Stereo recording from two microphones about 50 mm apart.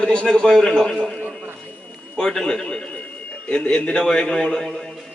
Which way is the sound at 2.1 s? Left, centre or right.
Centre.